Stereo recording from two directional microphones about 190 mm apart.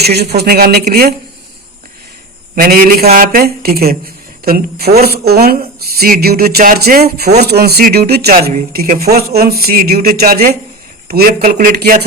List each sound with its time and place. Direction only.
0.0 s speech: 55° right (ahead or behind)
2.6 s speech: 50° right (ahead or behind)